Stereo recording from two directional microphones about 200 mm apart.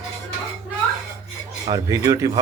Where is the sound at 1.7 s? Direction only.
15° right (ahead or behind).